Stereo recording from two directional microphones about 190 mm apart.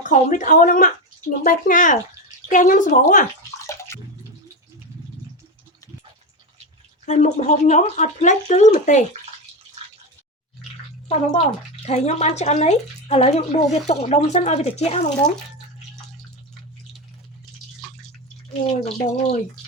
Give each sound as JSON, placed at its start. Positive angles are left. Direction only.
{"t": 0.0, "sound": "speech", "side_deg": 40}
{"t": 7.0, "sound": "speech", "side_deg": 40}
{"t": 11.9, "sound": "speech", "side_deg": 35}
{"t": 18.7, "sound": "speech", "side_deg": 30}